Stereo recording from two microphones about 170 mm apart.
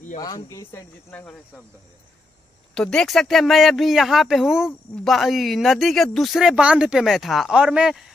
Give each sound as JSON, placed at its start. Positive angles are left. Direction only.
{"t": 0.2, "sound": "speech", "side_deg": 20}
{"t": 2.7, "sound": "speech", "side_deg": 5}